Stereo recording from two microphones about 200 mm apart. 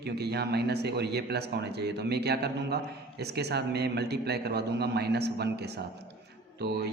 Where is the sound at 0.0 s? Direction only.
55° right (ahead or behind).